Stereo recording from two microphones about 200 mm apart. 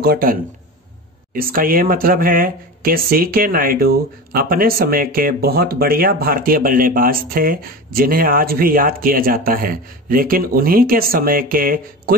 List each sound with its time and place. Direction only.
0.0 s speech: 50° right (ahead or behind)